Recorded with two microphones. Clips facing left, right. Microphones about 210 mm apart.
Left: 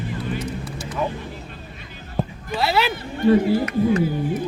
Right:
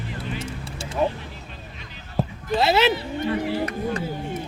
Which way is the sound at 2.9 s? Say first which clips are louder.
Left 8 dB; 45° left (ahead or behind).